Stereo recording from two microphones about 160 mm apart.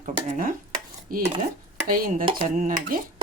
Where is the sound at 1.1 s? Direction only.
65° right (ahead or behind).